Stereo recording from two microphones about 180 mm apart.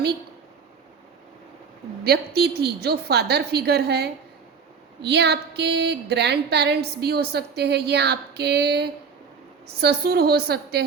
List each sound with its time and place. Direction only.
2.0 s a woman's voice: 65° right (ahead or behind)